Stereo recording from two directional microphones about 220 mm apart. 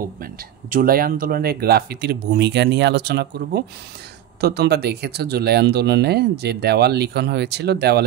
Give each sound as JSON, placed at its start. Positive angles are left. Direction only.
{"t": 0.2, "sound": "speech", "side_deg": -40}